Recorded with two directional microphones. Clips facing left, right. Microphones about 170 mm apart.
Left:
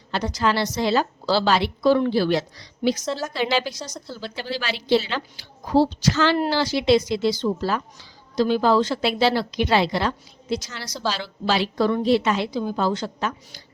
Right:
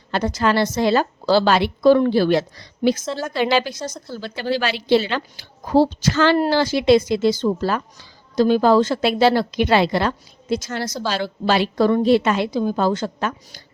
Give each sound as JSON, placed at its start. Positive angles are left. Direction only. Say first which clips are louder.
{"t": 0.1, "sound": "a woman's voice", "louder": "right 3 dB", "side_deg": -50}
{"t": 3.0, "sound": "a woman's voice", "louder": "right 1 dB", "side_deg": 0}
{"t": 3.2, "sound": "a woman's voice", "louder": "right 5 dB", "side_deg": -55}